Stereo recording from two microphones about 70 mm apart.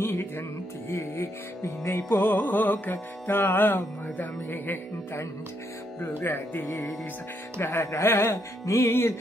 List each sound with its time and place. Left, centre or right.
0.0 s music: left
6.7 s speech: left
7.6 s music: left